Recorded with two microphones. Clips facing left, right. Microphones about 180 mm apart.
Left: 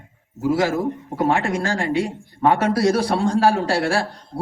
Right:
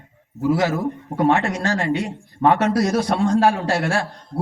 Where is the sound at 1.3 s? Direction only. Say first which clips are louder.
Even; 30° left (ahead or behind).